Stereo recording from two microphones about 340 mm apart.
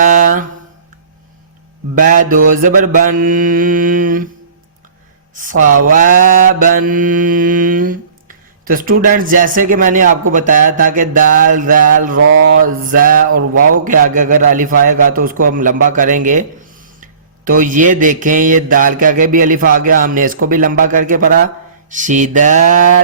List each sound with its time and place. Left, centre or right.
0.0 s a sound: right
2.0 s speech: right
5.3 s speech: right
13.5 s a man's voice: right
13.8 s speech: right